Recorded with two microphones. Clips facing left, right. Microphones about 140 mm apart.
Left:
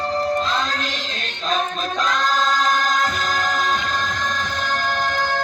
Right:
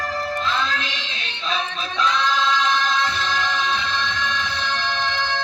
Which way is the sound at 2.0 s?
45° left (ahead or behind).